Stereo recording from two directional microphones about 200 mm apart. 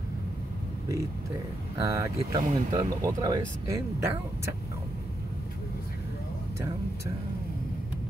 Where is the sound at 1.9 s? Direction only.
15° right (ahead or behind).